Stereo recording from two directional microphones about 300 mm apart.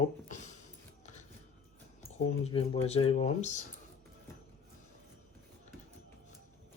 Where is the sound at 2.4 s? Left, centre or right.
Centre.